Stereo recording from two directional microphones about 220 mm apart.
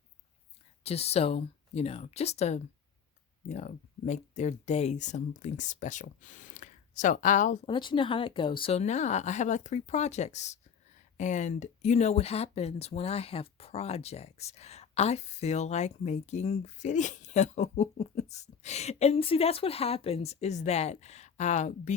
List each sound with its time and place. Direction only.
0.9 s speech: 30° left (ahead or behind)
7.7 s speech: 20° left (ahead or behind)